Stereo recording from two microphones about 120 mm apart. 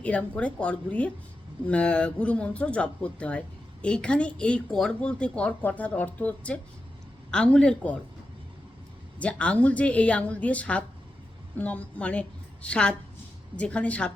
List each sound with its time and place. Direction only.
0.0 s speech: 10° left (ahead or behind)
9.2 s speech: 10° left (ahead or behind)